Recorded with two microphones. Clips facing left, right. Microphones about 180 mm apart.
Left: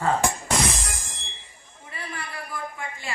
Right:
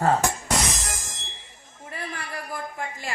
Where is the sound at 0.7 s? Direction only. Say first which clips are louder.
Right 1 dB; 40° right (ahead or behind).